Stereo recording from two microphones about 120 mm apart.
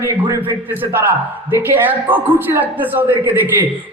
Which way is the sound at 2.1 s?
15° right (ahead or behind).